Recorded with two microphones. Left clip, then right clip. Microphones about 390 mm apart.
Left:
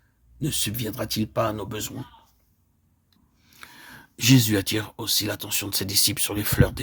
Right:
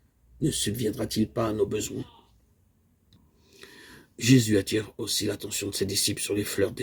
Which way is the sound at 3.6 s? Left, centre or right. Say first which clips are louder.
Left 4 dB; left.